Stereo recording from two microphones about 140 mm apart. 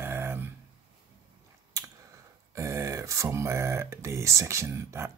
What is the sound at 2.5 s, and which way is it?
Speech, 20° right (ahead or behind).